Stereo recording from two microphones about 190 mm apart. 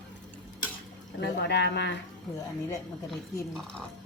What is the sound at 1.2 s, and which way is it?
Speech, 65° left (ahead or behind).